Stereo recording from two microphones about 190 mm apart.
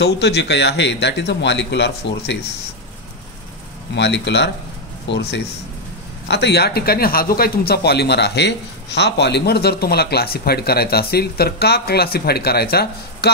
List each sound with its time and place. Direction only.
0.0 s a man's voice: 65° left (ahead or behind)
3.9 s a man's voice: 65° left (ahead or behind)